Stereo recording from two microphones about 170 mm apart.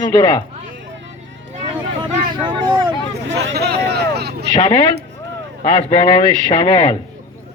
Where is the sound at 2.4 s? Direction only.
25° right (ahead or behind).